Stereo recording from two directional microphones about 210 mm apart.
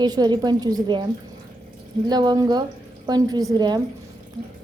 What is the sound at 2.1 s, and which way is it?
A woman's voice, 20° right (ahead or behind).